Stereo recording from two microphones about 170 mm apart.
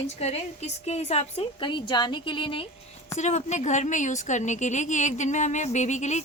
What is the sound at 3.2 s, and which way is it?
A woman's voice, 45° left (ahead or behind).